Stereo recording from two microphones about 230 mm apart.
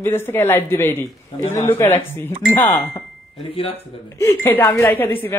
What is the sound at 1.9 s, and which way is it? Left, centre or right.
Speech, centre.